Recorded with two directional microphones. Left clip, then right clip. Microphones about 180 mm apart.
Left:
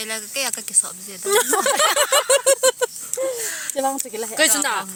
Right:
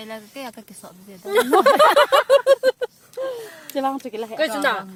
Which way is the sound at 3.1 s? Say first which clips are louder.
Left 2 dB; 55° right (ahead or behind).